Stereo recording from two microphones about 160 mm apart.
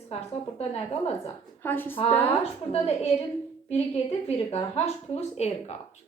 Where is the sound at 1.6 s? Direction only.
15° left (ahead or behind).